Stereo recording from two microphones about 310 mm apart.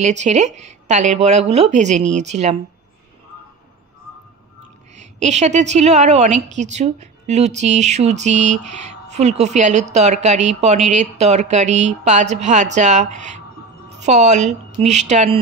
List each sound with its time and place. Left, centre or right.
0.0 s a woman's voice: right
4.9 s a woman's voice: right